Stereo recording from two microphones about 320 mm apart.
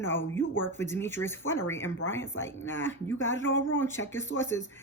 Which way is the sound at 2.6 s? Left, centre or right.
Left.